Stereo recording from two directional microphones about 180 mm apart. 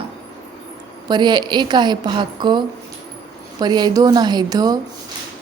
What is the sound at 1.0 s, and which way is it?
A woman's voice, 25° right (ahead or behind).